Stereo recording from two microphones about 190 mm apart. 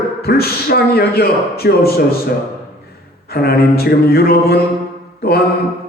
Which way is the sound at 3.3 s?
55° left (ahead or behind).